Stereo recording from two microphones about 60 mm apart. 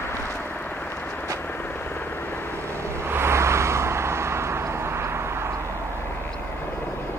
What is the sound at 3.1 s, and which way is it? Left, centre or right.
Vehicle, right.